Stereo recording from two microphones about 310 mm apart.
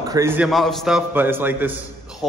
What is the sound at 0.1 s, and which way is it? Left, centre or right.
A man's voice, centre.